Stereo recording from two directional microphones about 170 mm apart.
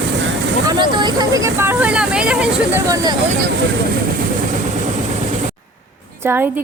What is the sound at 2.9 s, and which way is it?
Speech, 20° right (ahead or behind).